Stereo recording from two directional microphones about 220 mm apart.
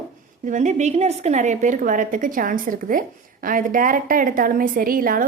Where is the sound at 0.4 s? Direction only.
35° right (ahead or behind).